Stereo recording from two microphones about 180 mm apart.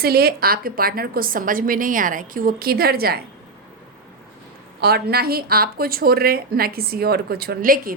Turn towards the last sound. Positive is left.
turn(degrees=-50)  # may be behind; listen again after turning